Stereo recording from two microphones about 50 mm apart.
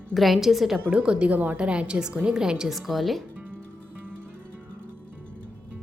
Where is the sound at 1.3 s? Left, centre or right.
Right.